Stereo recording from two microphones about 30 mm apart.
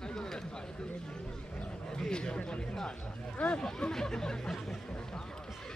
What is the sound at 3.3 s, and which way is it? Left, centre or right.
Speech, left.